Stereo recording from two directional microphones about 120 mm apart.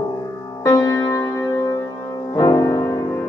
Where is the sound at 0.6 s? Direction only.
25° left (ahead or behind).